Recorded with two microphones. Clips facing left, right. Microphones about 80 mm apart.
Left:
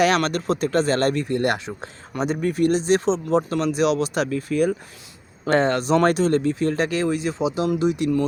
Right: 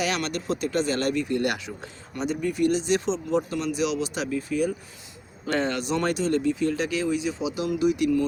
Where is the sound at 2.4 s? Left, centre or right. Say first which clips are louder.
Left 4 dB; left.